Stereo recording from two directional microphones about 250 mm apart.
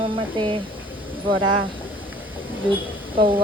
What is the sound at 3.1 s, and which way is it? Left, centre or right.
Speech, right.